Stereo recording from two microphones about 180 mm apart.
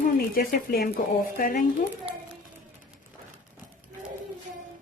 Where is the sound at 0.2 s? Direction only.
55° left (ahead or behind).